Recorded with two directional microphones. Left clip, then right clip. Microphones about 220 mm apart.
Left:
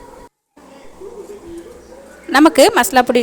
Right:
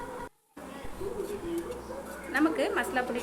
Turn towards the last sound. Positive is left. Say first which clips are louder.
# left 19 dB
turn(degrees=55)  # may be behind; listen again after turning